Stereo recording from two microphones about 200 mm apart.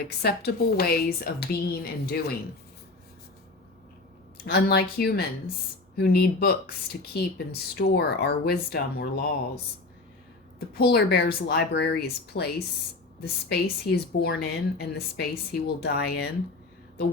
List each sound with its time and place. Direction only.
0.2 s speech: 55° left (ahead or behind)
4.4 s speech: 55° left (ahead or behind)
10.8 s speech: 50° left (ahead or behind)